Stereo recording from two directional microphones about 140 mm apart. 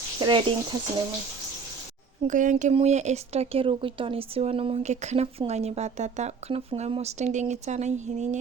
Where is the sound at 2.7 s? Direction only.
50° right (ahead or behind).